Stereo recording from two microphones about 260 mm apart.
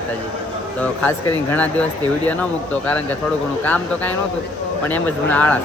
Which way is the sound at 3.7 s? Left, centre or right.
Centre.